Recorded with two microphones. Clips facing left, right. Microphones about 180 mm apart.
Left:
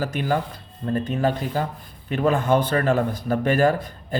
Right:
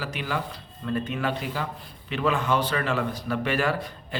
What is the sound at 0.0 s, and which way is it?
A man's voice, 45° left (ahead or behind).